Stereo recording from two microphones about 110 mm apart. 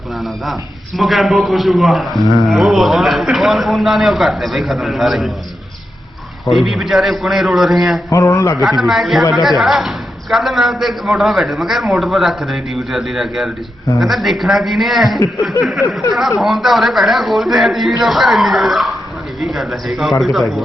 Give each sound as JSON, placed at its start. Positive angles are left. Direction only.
{"t": 0.9, "sound": "a man's voice", "side_deg": 0}
{"t": 6.5, "sound": "a man's voice", "side_deg": 0}
{"t": 8.1, "sound": "speech", "side_deg": 25}
{"t": 8.6, "sound": "a man's voice", "side_deg": 0}